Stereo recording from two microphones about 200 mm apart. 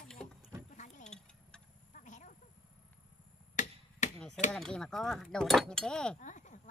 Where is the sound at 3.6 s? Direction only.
40° left (ahead or behind).